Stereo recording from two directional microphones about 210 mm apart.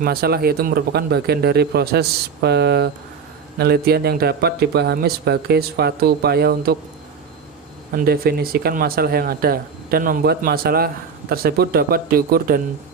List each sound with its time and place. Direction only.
0.0 s speech: 45° right (ahead or behind)
7.9 s speech: 45° right (ahead or behind)